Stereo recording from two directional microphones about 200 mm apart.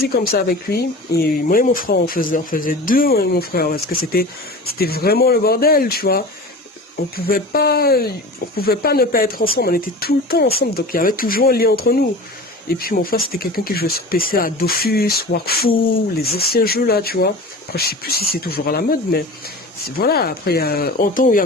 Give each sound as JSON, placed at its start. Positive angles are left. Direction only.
{"t": 0.0, "sound": "speech", "side_deg": 50}